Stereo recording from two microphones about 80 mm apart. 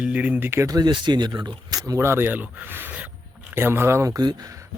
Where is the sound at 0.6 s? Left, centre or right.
Right.